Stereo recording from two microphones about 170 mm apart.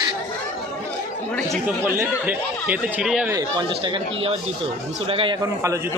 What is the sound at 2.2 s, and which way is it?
Speech, 10° right (ahead or behind).